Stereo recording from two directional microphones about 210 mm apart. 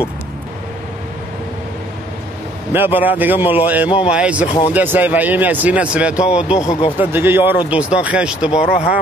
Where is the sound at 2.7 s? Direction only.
10° right (ahead or behind).